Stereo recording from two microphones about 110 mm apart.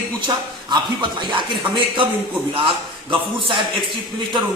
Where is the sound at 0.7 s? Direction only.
45° right (ahead or behind).